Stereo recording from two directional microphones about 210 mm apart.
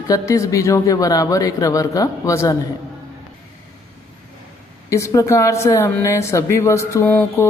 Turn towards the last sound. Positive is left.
turn(degrees=10)  # may be behind; listen again after turning